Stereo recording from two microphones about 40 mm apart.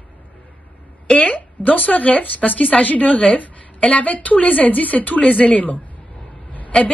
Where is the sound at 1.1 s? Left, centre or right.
Left.